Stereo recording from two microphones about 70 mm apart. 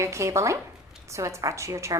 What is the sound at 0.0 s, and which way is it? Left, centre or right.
A woman's voice, right.